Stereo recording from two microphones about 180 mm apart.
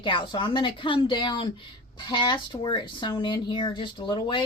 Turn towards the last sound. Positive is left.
turn(degrees=25)  # may be behind; listen again after turning